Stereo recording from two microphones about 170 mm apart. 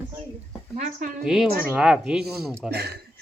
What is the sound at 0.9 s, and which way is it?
Speech, 50° right (ahead or behind).